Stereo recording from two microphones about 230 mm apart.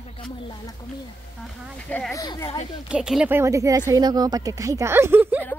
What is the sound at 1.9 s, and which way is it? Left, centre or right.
Speech, centre.